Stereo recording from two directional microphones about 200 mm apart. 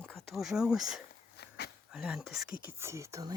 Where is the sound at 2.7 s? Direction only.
15° right (ahead or behind).